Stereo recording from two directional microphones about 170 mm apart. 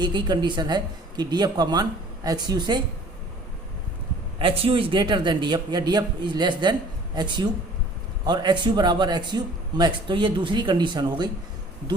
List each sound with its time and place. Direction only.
0.0 s a man's voice: 25° right (ahead or behind)
4.4 s a man's voice: 35° right (ahead or behind)